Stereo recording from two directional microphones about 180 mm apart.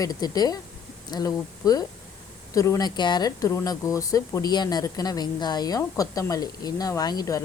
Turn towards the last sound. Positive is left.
turn(degrees=20)  # may be behind; listen again after turning